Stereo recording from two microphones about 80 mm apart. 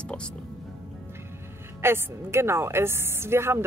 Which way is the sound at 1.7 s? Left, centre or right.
Right.